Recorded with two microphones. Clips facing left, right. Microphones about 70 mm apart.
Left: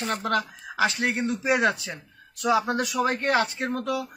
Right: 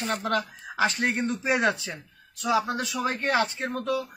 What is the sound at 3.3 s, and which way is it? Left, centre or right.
Speech, centre.